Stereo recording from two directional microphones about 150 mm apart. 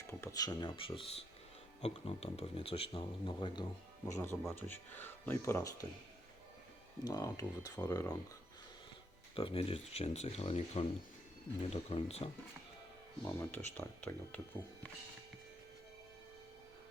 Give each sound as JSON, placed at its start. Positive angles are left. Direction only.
{"t": 0.1, "sound": "speech", "side_deg": 20}
{"t": 4.0, "sound": "speech", "side_deg": 15}
{"t": 7.0, "sound": "speech", "side_deg": 25}
{"t": 9.3, "sound": "speech", "side_deg": 35}
{"t": 13.2, "sound": "speech", "side_deg": 15}